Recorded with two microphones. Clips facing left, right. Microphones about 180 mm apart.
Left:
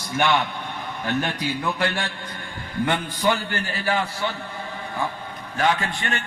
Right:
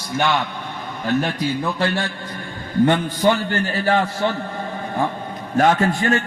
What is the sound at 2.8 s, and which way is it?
A man's voice, 40° right (ahead or behind).